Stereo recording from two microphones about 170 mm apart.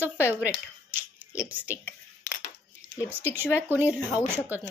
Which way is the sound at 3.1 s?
10° right (ahead or behind).